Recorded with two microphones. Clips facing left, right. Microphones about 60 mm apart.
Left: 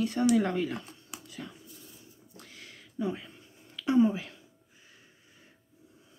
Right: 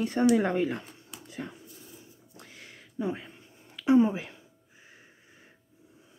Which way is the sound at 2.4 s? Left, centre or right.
Centre.